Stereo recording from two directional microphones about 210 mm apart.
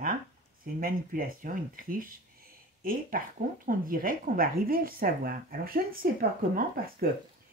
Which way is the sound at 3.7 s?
40° right (ahead or behind).